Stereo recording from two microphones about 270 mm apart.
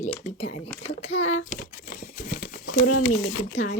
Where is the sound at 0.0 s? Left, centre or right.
Left.